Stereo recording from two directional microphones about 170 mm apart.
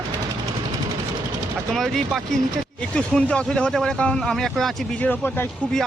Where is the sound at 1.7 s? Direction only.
Centre (ahead or behind).